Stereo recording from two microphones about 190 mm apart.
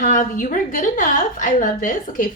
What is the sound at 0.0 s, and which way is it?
A woman's voice, 45° left (ahead or behind).